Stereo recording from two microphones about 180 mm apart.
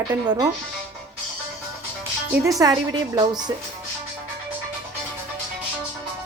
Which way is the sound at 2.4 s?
20° right (ahead or behind).